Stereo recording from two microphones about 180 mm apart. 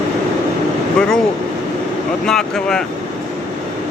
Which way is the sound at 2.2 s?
5° left (ahead or behind).